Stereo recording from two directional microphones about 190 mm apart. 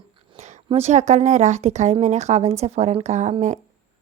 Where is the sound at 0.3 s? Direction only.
35° right (ahead or behind).